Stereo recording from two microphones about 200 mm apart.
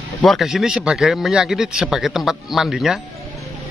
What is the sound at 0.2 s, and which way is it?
Speech, centre (ahead or behind).